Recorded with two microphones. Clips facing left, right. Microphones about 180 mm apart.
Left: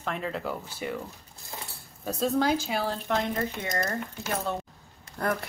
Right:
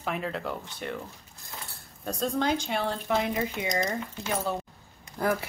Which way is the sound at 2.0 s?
5° left (ahead or behind).